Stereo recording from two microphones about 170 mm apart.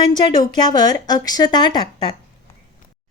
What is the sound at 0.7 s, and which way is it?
A woman's voice, 25° left (ahead or behind).